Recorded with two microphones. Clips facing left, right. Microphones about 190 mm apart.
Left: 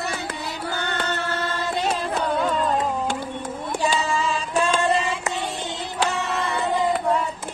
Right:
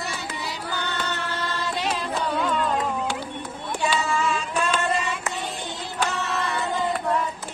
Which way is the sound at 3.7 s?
35° left (ahead or behind).